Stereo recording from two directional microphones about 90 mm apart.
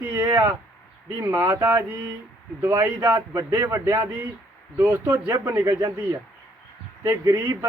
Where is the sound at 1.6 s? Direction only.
25° right (ahead or behind).